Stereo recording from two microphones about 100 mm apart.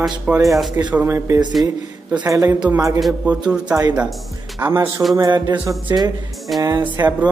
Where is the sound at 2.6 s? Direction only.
15° right (ahead or behind).